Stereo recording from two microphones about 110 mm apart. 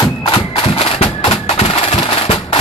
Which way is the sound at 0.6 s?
60° left (ahead or behind).